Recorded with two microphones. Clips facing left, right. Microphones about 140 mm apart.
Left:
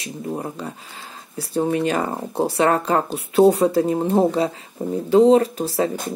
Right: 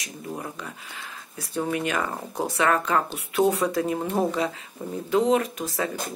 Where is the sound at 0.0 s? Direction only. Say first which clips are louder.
Left 7 dB; 30° left (ahead or behind).